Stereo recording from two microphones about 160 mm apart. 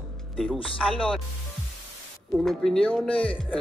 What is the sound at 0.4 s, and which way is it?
Speech, 5° left (ahead or behind).